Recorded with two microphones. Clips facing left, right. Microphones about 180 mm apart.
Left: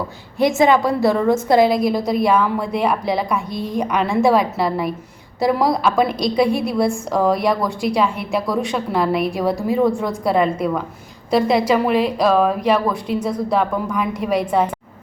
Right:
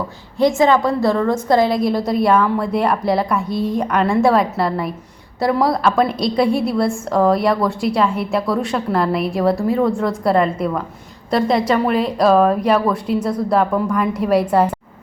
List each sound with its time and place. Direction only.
0.5 s a woman's voice: 15° left (ahead or behind)
1.2 s a woman's voice: 25° left (ahead or behind)
1.5 s a woman's voice: centre (ahead or behind)